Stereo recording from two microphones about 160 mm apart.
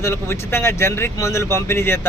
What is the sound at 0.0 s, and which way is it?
Speech, 15° left (ahead or behind).